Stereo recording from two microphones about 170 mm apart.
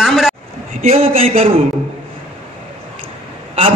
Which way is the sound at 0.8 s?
35° right (ahead or behind).